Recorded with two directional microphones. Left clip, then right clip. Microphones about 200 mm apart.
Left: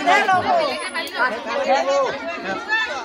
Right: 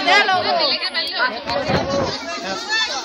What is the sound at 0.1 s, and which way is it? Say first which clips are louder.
Speech: right 1 dB; 25° left (ahead or behind).